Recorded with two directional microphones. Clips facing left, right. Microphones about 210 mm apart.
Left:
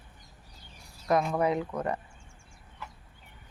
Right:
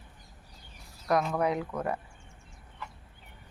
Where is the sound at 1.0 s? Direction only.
5° left (ahead or behind).